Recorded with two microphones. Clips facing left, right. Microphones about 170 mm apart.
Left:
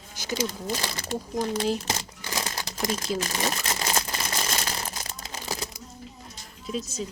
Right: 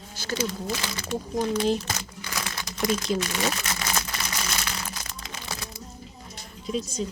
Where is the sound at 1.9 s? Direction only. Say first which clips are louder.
Left 1 dB; 35° left (ahead or behind).